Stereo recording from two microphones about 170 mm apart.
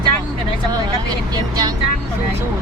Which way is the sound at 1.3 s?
25° right (ahead or behind).